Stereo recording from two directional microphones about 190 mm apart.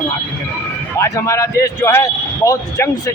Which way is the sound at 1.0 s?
15° left (ahead or behind).